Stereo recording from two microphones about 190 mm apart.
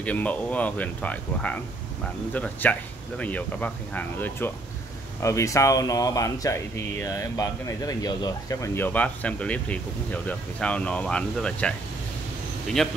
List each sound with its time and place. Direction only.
0.0 s speech: 10° left (ahead or behind)
12.8 s speech: centre (ahead or behind)